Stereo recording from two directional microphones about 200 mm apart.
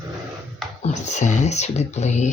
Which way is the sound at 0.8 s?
35° left (ahead or behind).